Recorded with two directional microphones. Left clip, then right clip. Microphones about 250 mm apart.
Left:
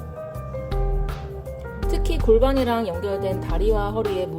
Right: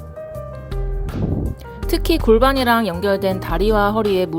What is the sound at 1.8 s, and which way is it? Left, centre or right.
Music, right.